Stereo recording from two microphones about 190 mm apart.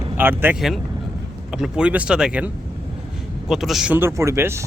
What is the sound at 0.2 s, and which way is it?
Speech, 10° right (ahead or behind).